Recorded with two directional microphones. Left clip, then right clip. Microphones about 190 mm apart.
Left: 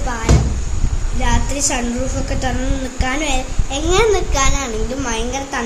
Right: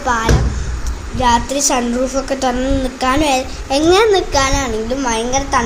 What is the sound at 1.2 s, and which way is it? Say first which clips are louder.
A child's voice: right 7 dB; 20° right (ahead or behind).